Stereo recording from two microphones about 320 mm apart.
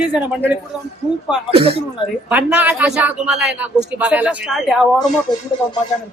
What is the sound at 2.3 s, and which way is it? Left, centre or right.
A man's voice, centre.